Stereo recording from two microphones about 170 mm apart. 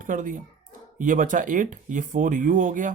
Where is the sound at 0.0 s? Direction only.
50° right (ahead or behind).